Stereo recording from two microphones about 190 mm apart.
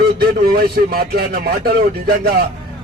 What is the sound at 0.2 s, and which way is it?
Speech, 55° right (ahead or behind).